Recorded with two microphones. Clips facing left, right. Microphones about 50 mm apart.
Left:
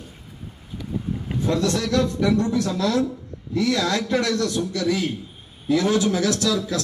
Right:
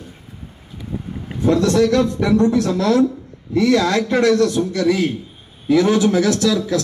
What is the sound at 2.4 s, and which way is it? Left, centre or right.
A man's voice, right.